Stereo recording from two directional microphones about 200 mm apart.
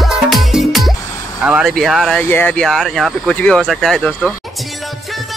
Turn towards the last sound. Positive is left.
turn(degrees=5)  # may be behind; listen again after turning